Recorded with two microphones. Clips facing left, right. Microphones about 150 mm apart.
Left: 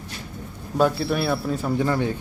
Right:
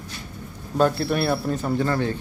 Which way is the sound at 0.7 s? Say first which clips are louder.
Even; centre (ahead or behind).